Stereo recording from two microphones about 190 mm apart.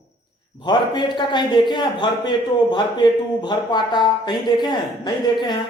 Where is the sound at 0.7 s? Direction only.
25° left (ahead or behind).